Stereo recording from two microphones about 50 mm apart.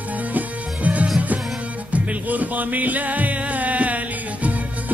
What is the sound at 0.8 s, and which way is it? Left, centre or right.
Music, right.